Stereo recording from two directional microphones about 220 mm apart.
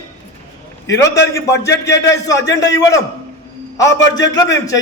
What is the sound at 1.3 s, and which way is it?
A man's voice, 15° left (ahead or behind).